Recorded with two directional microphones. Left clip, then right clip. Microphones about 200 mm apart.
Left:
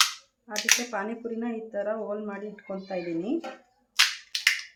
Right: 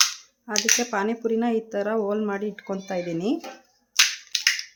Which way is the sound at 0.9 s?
55° right (ahead or behind).